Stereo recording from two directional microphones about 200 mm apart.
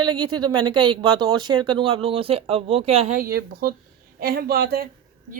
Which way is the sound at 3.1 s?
50° right (ahead or behind).